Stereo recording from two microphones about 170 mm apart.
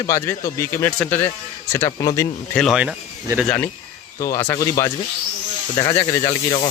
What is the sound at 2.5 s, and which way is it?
Speech, centre (ahead or behind).